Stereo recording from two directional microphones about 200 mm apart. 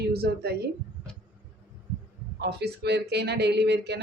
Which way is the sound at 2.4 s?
55° right (ahead or behind).